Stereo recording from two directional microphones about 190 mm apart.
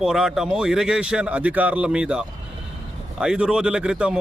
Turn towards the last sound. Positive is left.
turn(degrees=-5)  # may be behind; listen again after turning